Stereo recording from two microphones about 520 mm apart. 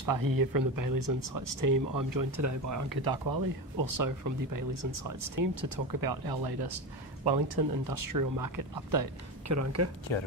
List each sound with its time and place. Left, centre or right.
0.0 s speech: right
10.1 s speech: left